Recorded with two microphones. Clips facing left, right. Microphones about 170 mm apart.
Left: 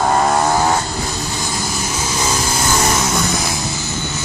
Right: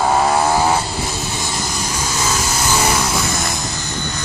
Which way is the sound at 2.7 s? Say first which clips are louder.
Even; 10° right (ahead or behind).